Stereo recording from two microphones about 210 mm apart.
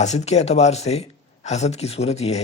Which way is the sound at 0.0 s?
30° left (ahead or behind).